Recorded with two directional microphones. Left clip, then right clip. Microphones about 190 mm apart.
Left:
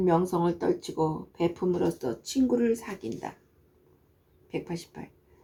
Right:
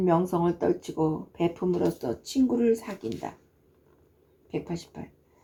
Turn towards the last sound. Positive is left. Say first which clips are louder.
# right 1 dB
turn(degrees=-15)  # may be behind; listen again after turning